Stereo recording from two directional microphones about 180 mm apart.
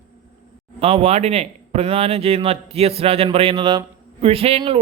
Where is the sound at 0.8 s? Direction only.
35° right (ahead or behind).